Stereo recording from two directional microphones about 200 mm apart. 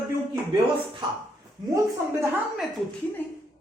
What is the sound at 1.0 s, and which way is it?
Speech, 25° right (ahead or behind).